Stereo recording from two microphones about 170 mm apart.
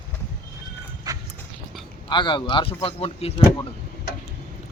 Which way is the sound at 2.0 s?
25° left (ahead or behind).